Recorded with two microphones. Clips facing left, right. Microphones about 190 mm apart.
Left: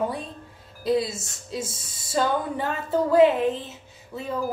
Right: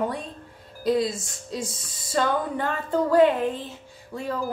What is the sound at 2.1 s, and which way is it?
Speech, 5° left (ahead or behind).